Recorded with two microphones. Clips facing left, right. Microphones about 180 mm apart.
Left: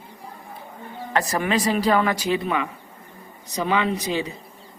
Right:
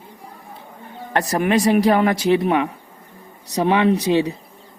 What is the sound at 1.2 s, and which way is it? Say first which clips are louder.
Speech: right 7 dB; 65° right (ahead or behind).